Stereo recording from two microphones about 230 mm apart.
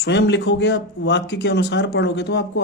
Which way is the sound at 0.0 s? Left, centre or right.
Left.